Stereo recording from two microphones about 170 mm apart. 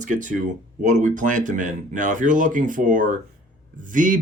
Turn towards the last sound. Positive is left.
turn(degrees=-50)  # may be behind; listen again after turning